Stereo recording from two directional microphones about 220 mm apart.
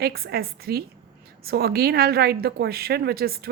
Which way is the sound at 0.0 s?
45° right (ahead or behind).